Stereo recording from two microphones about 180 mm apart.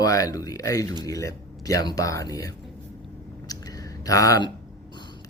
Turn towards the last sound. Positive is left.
turn(degrees=20)  # may be behind; listen again after turning